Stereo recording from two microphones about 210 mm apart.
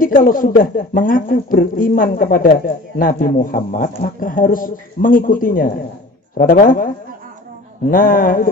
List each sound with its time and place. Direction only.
0.0 s speech: 40° left (ahead or behind)
7.9 s speech: 40° left (ahead or behind)